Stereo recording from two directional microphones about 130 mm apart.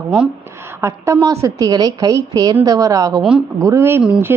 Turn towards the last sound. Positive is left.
turn(degrees=-10)  # may be behind; listen again after turning